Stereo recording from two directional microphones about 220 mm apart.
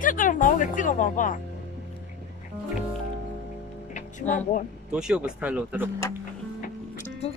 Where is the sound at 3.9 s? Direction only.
35° left (ahead or behind).